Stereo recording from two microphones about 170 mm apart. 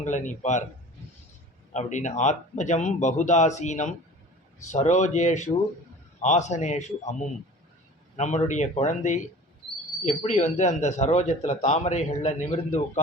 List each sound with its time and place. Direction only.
0.0 s speech: 45° left (ahead or behind)
1.7 s speech: 45° left (ahead or behind)